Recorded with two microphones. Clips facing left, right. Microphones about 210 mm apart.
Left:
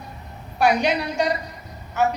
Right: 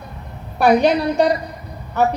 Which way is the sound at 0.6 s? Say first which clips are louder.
Right 6 dB; 55° right (ahead or behind).